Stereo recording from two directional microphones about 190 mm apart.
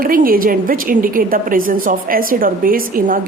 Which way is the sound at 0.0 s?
50° right (ahead or behind).